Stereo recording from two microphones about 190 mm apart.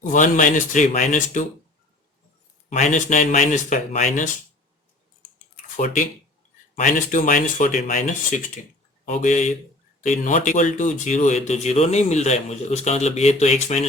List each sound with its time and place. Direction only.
0.1 s speech: 40° left (ahead or behind)
2.6 s speech: 40° left (ahead or behind)
5.7 s speech: 40° left (ahead or behind)